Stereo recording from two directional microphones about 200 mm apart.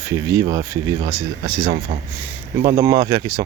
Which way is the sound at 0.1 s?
15° right (ahead or behind).